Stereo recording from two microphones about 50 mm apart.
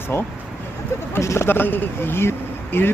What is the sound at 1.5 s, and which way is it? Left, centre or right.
Speech, left.